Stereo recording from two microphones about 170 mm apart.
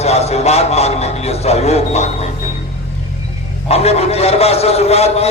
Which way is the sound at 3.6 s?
40° left (ahead or behind).